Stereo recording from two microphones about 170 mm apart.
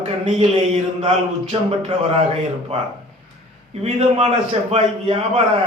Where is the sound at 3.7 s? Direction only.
40° right (ahead or behind).